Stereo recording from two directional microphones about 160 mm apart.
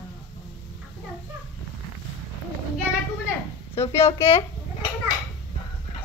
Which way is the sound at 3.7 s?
15° left (ahead or behind).